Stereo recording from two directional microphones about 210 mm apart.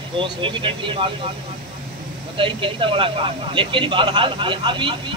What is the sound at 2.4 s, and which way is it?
Speech, 25° right (ahead or behind).